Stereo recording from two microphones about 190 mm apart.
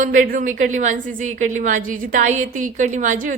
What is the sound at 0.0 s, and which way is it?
A woman's voice, 45° right (ahead or behind).